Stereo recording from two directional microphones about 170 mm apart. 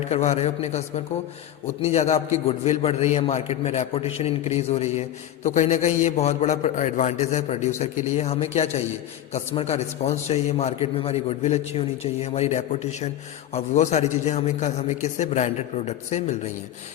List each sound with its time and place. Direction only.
0.1 s a man's voice: 40° left (ahead or behind)